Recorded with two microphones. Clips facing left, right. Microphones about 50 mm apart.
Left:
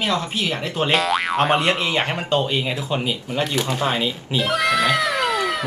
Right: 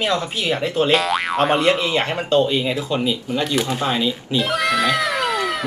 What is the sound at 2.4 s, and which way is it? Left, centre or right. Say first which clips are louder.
Speech: right 3 dB; centre.